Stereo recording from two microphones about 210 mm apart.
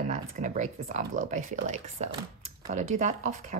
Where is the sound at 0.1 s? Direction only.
35° right (ahead or behind).